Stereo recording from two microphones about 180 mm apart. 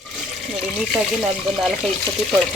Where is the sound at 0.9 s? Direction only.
Centre (ahead or behind).